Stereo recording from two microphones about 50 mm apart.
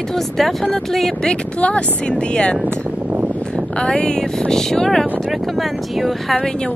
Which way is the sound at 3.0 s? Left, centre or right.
Right.